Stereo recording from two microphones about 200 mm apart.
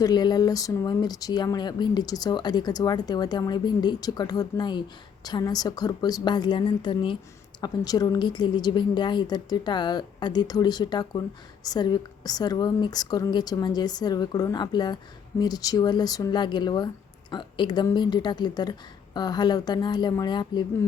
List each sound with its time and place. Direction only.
0.0 s speech: 20° left (ahead or behind)